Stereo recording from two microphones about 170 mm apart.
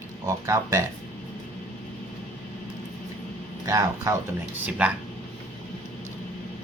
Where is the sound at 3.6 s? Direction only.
20° right (ahead or behind).